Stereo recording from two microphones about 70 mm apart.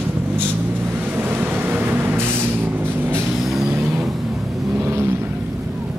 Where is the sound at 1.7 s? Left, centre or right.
Right.